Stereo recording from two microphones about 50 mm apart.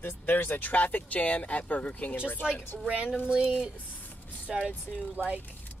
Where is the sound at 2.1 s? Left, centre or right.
Left.